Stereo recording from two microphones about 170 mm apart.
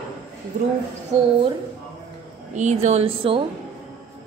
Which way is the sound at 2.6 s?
45° right (ahead or behind).